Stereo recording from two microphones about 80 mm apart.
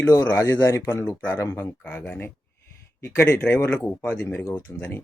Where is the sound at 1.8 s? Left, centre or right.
Centre.